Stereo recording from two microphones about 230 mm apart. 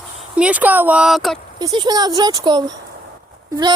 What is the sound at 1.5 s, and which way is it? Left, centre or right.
Speech, centre.